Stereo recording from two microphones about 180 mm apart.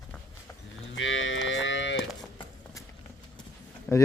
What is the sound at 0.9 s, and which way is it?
Cattle, 90° left.